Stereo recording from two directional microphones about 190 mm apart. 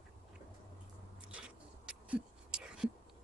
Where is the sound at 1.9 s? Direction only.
5° right (ahead or behind).